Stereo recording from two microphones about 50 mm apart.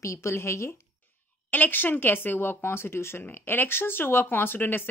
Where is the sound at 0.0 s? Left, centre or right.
Left.